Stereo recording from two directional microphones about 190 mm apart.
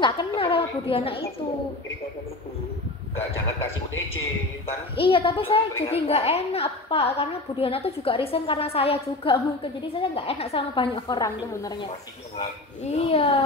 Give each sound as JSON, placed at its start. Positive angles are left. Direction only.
{"t": 0.0, "sound": "speech", "side_deg": 25}
{"t": 4.9, "sound": "a child's voice", "side_deg": 30}
{"t": 12.4, "sound": "speech", "side_deg": 35}